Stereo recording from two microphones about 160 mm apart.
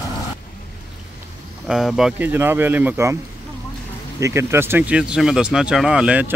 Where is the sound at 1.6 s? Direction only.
Centre (ahead or behind).